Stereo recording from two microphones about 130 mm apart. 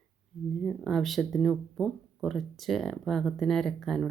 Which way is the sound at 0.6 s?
Centre (ahead or behind).